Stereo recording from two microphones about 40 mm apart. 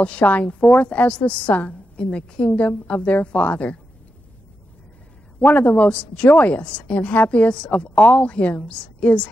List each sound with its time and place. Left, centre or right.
0.2 s a woman's voice: left
5.4 s a woman's voice: left